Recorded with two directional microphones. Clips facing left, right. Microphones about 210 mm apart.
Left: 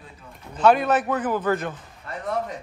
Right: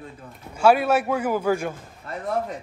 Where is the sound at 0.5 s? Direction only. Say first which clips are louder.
Even; 10° right (ahead or behind).